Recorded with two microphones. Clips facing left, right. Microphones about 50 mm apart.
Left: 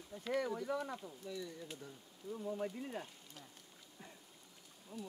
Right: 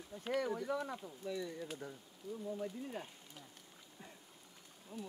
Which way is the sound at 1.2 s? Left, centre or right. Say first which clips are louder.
Right 8 dB; right.